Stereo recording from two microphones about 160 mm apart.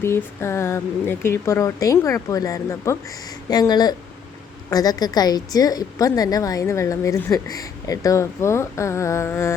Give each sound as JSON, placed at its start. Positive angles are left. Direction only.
{"t": 0.0, "sound": "a woman's voice", "side_deg": 15}